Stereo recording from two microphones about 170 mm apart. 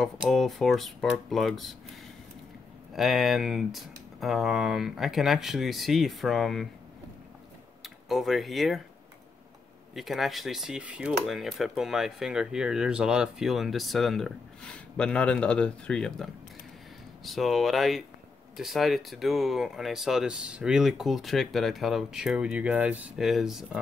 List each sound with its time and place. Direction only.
0.0 s speech: centre (ahead or behind)
2.9 s speech: centre (ahead or behind)
7.8 s speech: centre (ahead or behind)
9.9 s speech: centre (ahead or behind)